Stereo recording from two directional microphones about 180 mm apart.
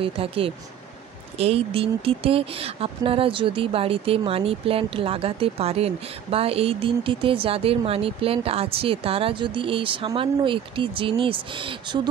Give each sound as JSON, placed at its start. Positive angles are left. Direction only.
{"t": 0.0, "sound": "speech", "side_deg": -30}